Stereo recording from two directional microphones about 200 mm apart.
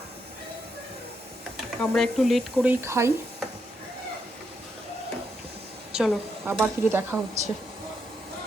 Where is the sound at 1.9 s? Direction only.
Centre (ahead or behind).